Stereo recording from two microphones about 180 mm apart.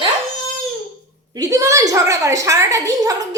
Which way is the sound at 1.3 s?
20° right (ahead or behind).